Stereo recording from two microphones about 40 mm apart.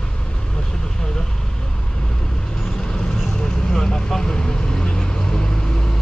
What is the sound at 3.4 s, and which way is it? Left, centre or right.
Vehicle, centre.